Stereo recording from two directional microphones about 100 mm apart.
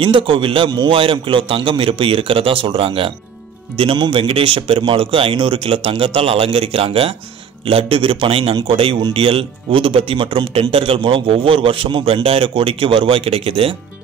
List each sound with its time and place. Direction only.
0.0 s speech: 60° right (ahead or behind)